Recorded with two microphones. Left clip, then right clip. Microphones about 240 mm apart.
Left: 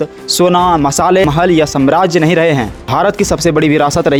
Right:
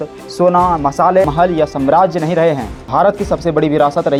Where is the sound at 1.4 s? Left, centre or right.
Left.